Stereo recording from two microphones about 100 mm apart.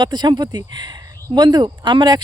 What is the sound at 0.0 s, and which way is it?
Speech, 45° right (ahead or behind).